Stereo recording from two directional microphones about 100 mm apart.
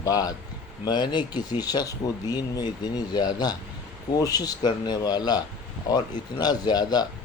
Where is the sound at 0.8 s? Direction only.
50° left (ahead or behind).